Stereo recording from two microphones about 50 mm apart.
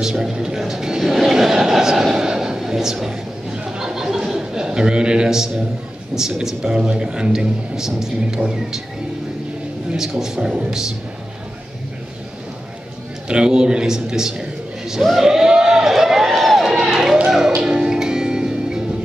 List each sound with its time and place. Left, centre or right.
0.0 s a man's voice: centre
0.6 s a sound: centre
6.1 s a man's voice: centre
9.9 s a man's voice: centre
13.3 s a man's voice: centre
15.1 s run: centre
17.6 s music: centre